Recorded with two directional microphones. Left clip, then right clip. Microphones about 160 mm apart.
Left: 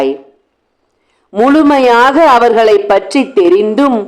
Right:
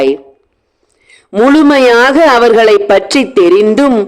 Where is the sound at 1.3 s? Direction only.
30° right (ahead or behind).